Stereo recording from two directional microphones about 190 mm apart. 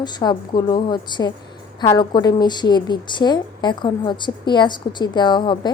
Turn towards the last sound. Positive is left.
turn(degrees=25)  # may be behind; listen again after turning